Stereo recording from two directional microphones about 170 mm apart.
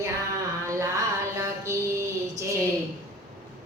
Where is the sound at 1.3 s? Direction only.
15° right (ahead or behind).